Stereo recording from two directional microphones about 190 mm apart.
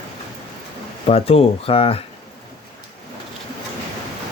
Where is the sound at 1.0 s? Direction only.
30° left (ahead or behind).